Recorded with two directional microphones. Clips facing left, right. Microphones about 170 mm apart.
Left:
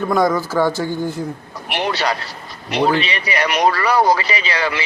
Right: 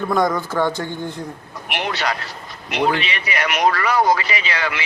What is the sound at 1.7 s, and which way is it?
A man's voice, 35° left (ahead or behind).